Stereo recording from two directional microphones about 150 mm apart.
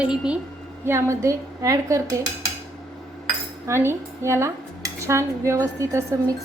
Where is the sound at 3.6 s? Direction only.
15° right (ahead or behind).